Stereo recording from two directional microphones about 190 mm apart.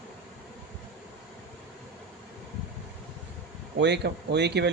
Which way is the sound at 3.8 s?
60° right (ahead or behind).